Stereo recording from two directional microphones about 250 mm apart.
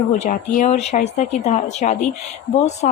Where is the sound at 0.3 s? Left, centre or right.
Left.